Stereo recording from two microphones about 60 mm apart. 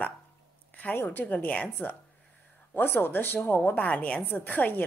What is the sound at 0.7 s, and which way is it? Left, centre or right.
A woman's voice, left.